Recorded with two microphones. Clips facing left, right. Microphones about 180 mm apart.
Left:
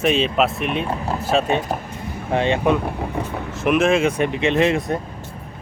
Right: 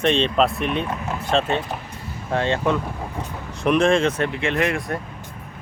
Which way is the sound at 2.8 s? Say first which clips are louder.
Left 5 dB; 65° left (ahead or behind).